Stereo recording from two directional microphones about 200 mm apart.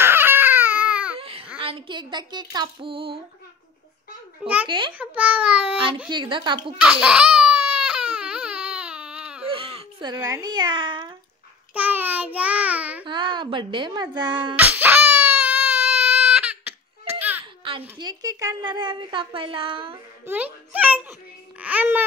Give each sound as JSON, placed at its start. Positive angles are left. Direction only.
{"t": 0.0, "sound": "baby cry", "side_deg": -10}
{"t": 1.1, "sound": "babbling", "side_deg": -30}
{"t": 1.6, "sound": "a woman's voice", "side_deg": -25}
{"t": 4.6, "sound": "a woman's voice", "side_deg": -25}
{"t": 4.9, "sound": "a child's voice", "side_deg": -5}
{"t": 6.0, "sound": "a woman's voice", "side_deg": -25}
{"t": 6.8, "sound": "baby cry", "side_deg": -5}
{"t": 9.5, "sound": "baby cry", "side_deg": -25}
{"t": 10.1, "sound": "a woman's voice", "side_deg": -15}
{"t": 11.7, "sound": "a child's voice", "side_deg": -10}
{"t": 13.0, "sound": "a woman's voice", "side_deg": -25}
{"t": 14.5, "sound": "baby cry", "side_deg": -10}
{"t": 17.9, "sound": "a woman's voice", "side_deg": -20}
{"t": 20.2, "sound": "a child's voice", "side_deg": -10}